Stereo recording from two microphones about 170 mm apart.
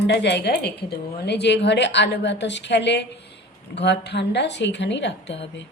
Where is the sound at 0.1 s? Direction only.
85° left.